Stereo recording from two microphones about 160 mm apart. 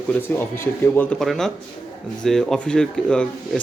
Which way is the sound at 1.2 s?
Centre (ahead or behind).